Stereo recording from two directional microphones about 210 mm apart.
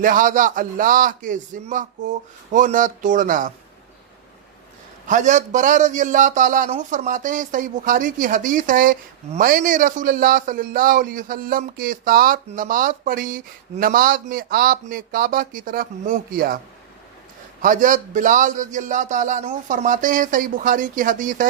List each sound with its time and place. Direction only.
0.0 s a man's voice: 40° right (ahead or behind)
5.0 s a man's voice: 35° right (ahead or behind)
17.6 s a man's voice: 40° right (ahead or behind)